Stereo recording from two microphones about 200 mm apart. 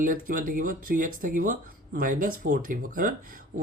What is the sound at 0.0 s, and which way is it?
Speech, 45° right (ahead or behind).